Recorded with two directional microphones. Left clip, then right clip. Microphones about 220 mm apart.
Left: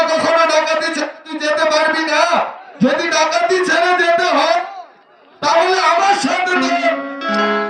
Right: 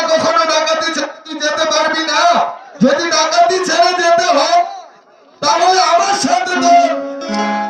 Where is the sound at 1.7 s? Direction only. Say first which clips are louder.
Even; 50° right (ahead or behind).